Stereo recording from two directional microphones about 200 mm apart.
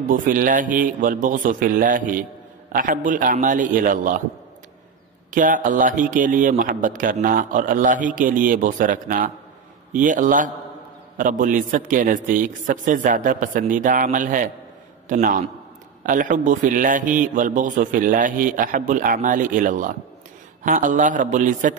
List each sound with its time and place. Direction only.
0.1 s a man's voice: 40° right (ahead or behind)
5.3 s a man's voice: 40° right (ahead or behind)